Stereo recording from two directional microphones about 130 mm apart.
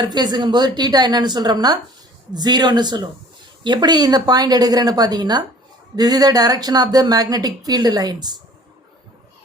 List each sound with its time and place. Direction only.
0.0 s a woman's voice: 35° right (ahead or behind)